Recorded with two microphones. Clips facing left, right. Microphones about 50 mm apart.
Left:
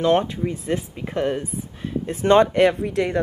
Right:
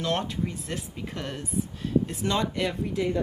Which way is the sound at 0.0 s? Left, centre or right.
Left.